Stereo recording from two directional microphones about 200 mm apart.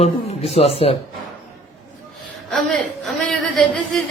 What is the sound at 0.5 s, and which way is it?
Speech, 30° left (ahead or behind).